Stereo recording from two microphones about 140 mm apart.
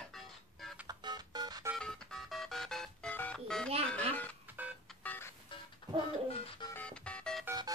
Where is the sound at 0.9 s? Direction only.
30° right (ahead or behind).